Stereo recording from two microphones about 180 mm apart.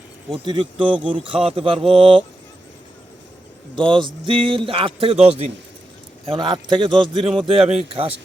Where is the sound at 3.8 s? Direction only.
30° right (ahead or behind).